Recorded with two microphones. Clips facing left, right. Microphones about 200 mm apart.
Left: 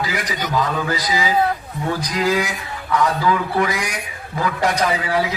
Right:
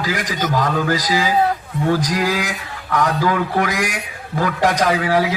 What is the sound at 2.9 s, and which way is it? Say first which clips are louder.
A man's voice: even; 50° right (ahead or behind).